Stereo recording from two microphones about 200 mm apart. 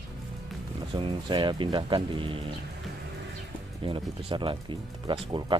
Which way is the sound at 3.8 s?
25° right (ahead or behind).